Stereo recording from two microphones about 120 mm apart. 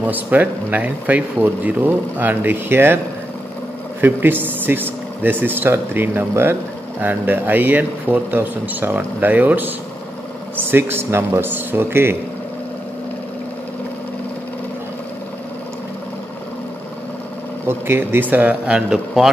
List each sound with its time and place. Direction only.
0.0 s speech: 15° right (ahead or behind)
4.0 s speech: 15° right (ahead or behind)
17.6 s speech: 20° right (ahead or behind); by 19.3 s 5° right (ahead or behind)